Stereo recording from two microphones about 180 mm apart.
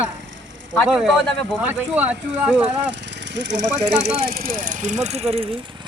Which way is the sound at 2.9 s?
75° right (ahead or behind).